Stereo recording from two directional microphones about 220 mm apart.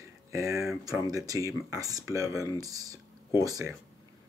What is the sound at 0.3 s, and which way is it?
Speech, 15° right (ahead or behind).